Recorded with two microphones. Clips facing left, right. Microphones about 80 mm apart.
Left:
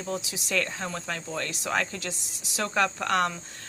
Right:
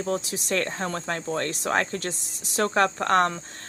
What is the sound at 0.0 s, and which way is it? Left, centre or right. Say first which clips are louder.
Speech: right 5 dB; right.